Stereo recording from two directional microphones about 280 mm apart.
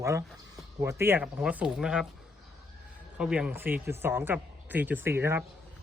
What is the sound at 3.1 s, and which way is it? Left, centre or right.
Speech, centre.